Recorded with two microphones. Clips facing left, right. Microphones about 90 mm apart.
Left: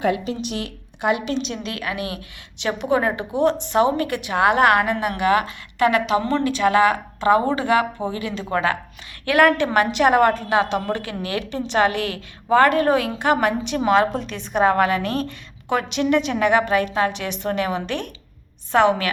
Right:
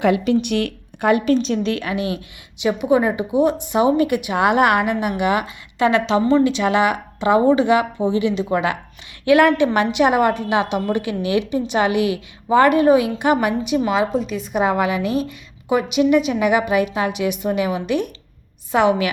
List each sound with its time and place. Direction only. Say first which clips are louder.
0.0 s a woman's voice: right 5 dB; 75° right (ahead or behind); by 2.2 s 25° right (ahead or behind)
2.6 s a woman's voice: right 4 dB; 10° right (ahead or behind)
5.9 s a woman's voice: right 4 dB; 30° right (ahead or behind)
13.8 s a woman's voice: left 1 dB; 5° right (ahead or behind)